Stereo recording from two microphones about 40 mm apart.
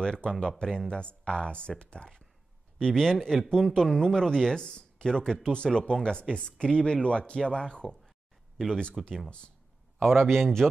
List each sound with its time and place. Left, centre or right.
0.0 s speech: left
2.9 s speech: centre
9.0 s speech: centre
9.9 s speech: centre